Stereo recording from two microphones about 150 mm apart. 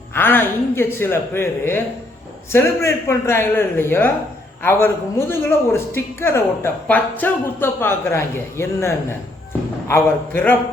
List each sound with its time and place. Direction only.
0.1 s a woman's voice: 15° left (ahead or behind)